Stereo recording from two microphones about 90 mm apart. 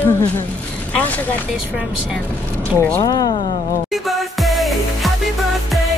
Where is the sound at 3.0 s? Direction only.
50° left (ahead or behind).